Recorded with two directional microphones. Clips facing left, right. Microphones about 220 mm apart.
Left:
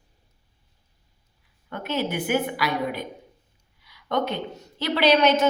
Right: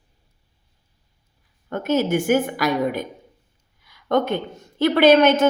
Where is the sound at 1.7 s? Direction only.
45° right (ahead or behind).